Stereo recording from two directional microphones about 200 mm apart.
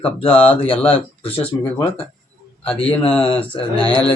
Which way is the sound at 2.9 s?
25° left (ahead or behind).